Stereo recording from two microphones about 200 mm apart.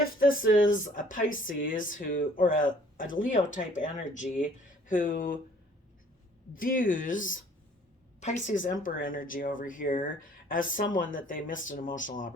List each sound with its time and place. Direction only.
0.0 s speech: 45° left (ahead or behind)
6.5 s speech: 45° left (ahead or behind)